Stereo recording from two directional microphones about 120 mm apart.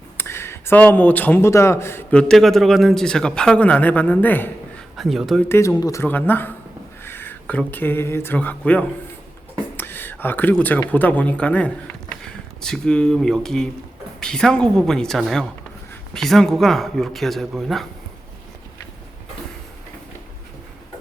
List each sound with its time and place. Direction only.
0.2 s speech: 20° left (ahead or behind)
4.9 s speech: centre (ahead or behind)
5.5 s speech: 25° left (ahead or behind)
6.0 s speech: 15° left (ahead or behind)
9.7 s a sound: 20° left (ahead or behind)
10.9 s a man's voice: 15° left (ahead or behind)